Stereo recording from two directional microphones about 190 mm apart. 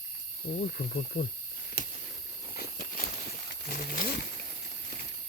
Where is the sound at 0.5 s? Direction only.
50° left (ahead or behind).